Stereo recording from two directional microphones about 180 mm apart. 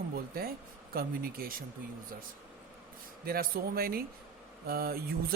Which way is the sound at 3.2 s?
55° right (ahead or behind).